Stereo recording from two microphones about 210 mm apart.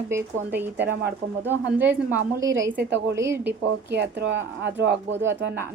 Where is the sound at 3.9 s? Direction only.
60° right (ahead or behind).